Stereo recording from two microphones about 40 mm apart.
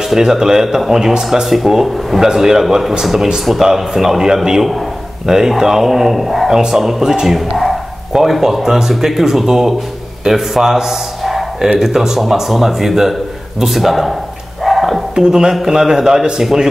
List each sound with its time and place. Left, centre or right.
0.1 s speech: centre
7.2 s a man's voice: centre
14.6 s a sound: centre
15.1 s speech: centre